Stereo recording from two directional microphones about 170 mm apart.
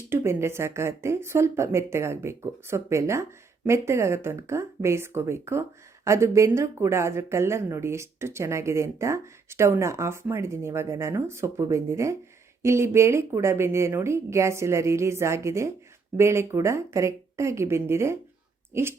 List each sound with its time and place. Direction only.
0.1 s speech: 15° right (ahead or behind)